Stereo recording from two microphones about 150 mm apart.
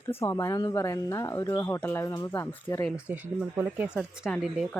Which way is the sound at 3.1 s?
10° right (ahead or behind).